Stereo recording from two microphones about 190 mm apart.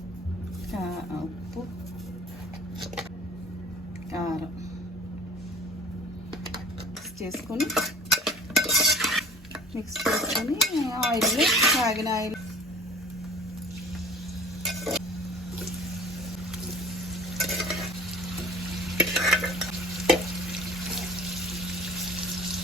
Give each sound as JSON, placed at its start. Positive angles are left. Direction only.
{"t": 4.1, "sound": "a sound", "side_deg": -15}
{"t": 7.3, "sound": "stir", "side_deg": 0}
{"t": 9.9, "sound": "dishes", "side_deg": 0}
{"t": 12.0, "sound": "speech", "side_deg": -15}
{"t": 14.6, "sound": "a sound", "side_deg": 0}
{"t": 17.3, "sound": "stir", "side_deg": 0}
{"t": 18.9, "sound": "stir", "side_deg": 0}
{"t": 20.7, "sound": "water", "side_deg": 0}